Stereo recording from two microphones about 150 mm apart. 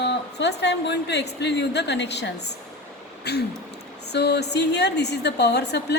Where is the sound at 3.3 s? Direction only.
90° left.